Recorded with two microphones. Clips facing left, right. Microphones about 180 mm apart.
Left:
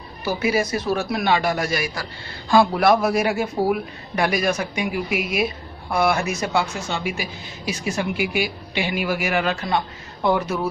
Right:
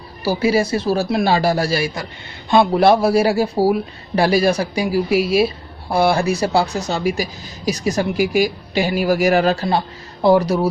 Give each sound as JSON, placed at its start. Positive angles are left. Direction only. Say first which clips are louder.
{"t": 0.2, "sound": "a man's voice", "louder": "right 5 dB", "side_deg": -30}